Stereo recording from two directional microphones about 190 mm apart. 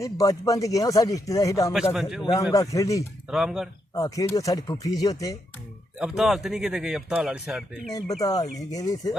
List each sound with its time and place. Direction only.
0.0 s speech: 15° left (ahead or behind)
1.9 s speech: centre (ahead or behind)
2.2 s speech: 20° left (ahead or behind)
3.2 s speech: 5° right (ahead or behind)
3.9 s speech: 20° left (ahead or behind)
6.0 s speech: centre (ahead or behind)
7.9 s speech: 20° left (ahead or behind)